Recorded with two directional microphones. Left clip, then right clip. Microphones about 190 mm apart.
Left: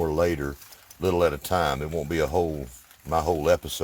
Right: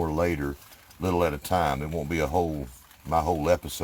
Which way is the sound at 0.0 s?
35° left (ahead or behind).